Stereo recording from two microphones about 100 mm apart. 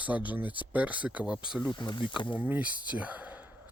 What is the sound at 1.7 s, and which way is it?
Speech, 50° left (ahead or behind).